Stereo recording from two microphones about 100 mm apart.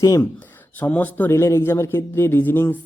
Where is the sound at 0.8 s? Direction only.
15° left (ahead or behind).